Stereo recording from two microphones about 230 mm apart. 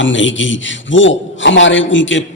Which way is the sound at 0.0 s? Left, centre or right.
Left.